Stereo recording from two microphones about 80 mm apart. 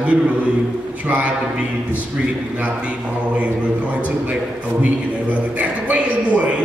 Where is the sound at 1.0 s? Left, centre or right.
Centre.